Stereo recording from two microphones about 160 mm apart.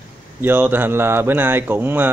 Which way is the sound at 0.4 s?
10° right (ahead or behind).